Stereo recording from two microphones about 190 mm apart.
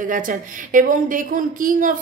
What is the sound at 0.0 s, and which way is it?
A woman's voice, 45° right (ahead or behind).